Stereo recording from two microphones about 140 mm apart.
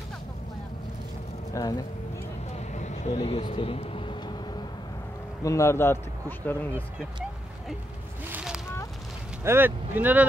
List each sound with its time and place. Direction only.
1.5 s speech: 25° left (ahead or behind)
2.5 s vehicle: 55° left (ahead or behind)
3.3 s vehicle: 40° left (ahead or behind)
5.4 s speech: 20° left (ahead or behind)
8.3 s a sound: 5° right (ahead or behind)
9.4 s speech: 15° right (ahead or behind)